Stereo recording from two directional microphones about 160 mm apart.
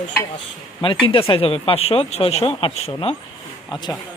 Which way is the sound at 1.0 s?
35° left (ahead or behind).